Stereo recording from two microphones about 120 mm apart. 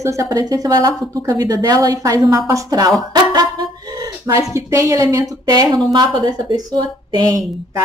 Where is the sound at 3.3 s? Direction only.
35° right (ahead or behind).